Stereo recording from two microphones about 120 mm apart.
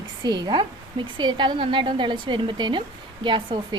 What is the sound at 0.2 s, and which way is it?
A woman's voice, 35° right (ahead or behind).